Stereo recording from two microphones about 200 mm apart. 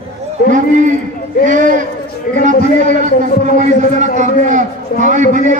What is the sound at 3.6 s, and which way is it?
A man's voice, 35° right (ahead or behind).